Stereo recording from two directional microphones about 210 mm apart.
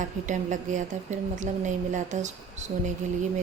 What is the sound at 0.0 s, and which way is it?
A woman's voice, 35° right (ahead or behind).